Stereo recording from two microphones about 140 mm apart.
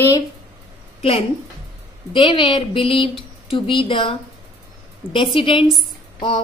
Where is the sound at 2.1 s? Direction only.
35° left (ahead or behind).